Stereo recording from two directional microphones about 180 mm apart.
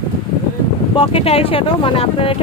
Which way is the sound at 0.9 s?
30° left (ahead or behind).